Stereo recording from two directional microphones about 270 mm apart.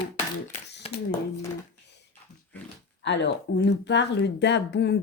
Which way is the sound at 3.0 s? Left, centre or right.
Left.